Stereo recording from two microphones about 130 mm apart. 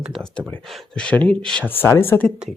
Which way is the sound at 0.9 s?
10° left (ahead or behind).